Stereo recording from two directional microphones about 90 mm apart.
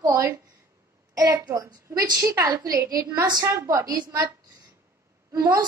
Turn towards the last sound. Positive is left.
turn(degrees=-45)  # may be behind; listen again after turning